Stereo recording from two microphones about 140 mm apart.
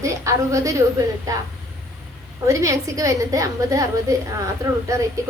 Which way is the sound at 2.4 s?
20° right (ahead or behind).